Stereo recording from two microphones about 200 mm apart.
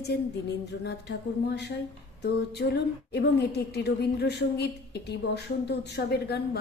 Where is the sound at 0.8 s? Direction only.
55° left (ahead or behind).